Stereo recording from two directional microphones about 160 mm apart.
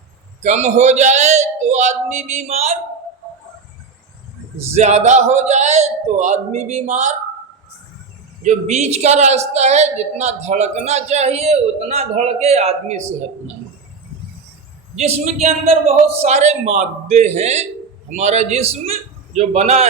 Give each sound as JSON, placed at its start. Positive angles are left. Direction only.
{"t": 0.4, "sound": "a woman's voice", "side_deg": -45}
{"t": 4.7, "sound": "a woman's voice", "side_deg": -45}
{"t": 8.4, "sound": "a woman's voice", "side_deg": -50}
{"t": 14.9, "sound": "a man's voice", "side_deg": -45}